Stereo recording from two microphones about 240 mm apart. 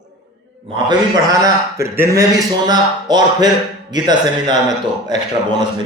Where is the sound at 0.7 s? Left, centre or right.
Centre.